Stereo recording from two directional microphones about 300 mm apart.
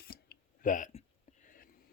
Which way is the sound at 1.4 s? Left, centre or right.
Left.